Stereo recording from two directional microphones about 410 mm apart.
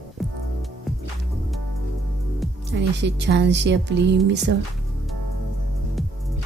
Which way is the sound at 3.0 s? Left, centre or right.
Right.